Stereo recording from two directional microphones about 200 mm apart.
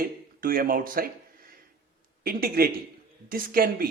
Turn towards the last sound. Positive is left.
turn(degrees=-45)  # may be behind; listen again after turning